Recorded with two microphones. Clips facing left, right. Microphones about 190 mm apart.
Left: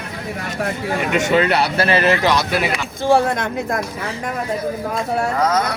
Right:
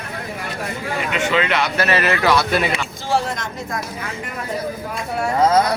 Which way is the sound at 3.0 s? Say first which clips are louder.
Left 8 dB; 55° left (ahead or behind).